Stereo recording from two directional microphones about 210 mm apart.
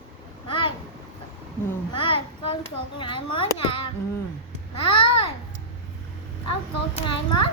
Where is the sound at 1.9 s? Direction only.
25° left (ahead or behind).